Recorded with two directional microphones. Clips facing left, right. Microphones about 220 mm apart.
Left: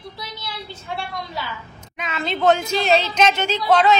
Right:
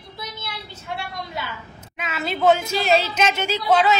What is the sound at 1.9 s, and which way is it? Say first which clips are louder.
A woman's voice: left 1 dB; 5° right (ahead or behind).